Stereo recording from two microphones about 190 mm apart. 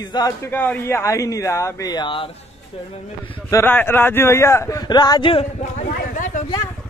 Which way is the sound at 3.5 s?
10° left (ahead or behind).